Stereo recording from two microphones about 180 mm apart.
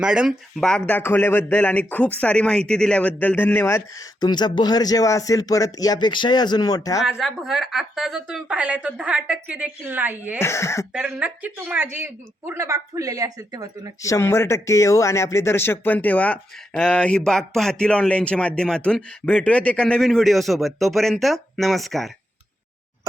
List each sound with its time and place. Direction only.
0.0 s a man's voice: 5° right (ahead or behind); by 7.0 s 20° left (ahead or behind)
7.0 s a woman's voice: centre (ahead or behind)
10.4 s speech: 15° left (ahead or behind)
10.9 s a woman's voice: 5° right (ahead or behind)
14.0 s speech: 15° left (ahead or behind)